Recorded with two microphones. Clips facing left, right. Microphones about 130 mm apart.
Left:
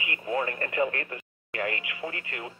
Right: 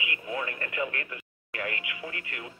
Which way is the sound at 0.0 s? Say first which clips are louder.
Left 4 dB; 40° left (ahead or behind).